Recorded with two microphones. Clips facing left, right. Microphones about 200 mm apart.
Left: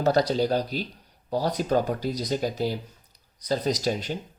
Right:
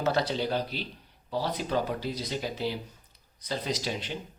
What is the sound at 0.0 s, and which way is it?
Speech, 40° left (ahead or behind).